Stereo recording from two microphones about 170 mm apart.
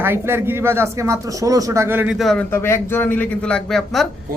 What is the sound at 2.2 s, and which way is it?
Speech, centre (ahead or behind).